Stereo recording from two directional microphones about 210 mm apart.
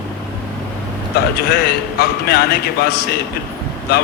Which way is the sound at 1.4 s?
50° left (ahead or behind).